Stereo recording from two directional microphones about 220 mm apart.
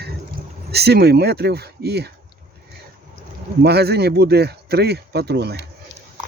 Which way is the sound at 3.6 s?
45° right (ahead or behind).